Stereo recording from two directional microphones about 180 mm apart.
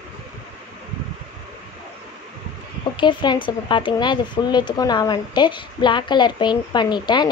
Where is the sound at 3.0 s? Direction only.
25° left (ahead or behind).